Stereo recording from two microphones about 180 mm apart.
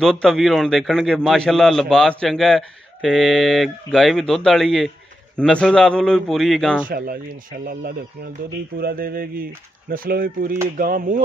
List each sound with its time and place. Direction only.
0.0 s a man's voice: 5° left (ahead or behind)
6.9 s speech: 50° right (ahead or behind)
8.7 s speech: 55° right (ahead or behind)